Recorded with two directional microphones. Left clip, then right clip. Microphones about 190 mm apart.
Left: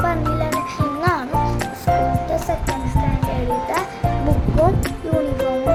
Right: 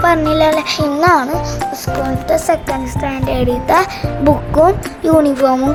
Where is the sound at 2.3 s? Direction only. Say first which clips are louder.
Right 8 dB; 50° right (ahead or behind).